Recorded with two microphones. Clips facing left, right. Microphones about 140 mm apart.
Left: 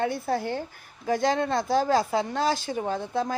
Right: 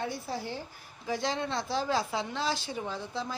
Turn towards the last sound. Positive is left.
turn(degrees=50)  # may be behind; listen again after turning